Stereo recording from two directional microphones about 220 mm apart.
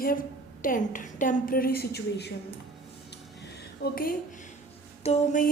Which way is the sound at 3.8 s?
40° left (ahead or behind).